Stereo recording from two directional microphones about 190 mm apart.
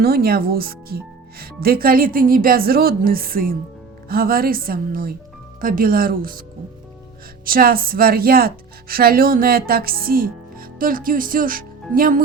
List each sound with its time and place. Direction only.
0.0 s speech: 55° right (ahead or behind)
7.4 s speech: 50° right (ahead or behind)